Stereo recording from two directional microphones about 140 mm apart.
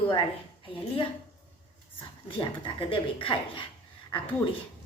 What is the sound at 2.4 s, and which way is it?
A woman's voice, 40° left (ahead or behind).